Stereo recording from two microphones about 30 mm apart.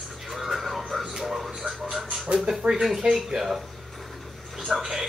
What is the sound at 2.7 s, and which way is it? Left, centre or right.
Speech, centre.